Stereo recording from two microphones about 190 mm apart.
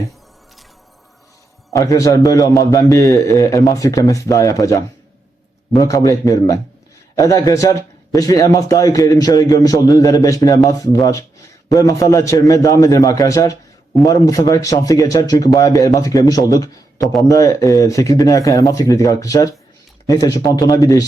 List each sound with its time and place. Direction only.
1.7 s a man's voice: 15° left (ahead or behind)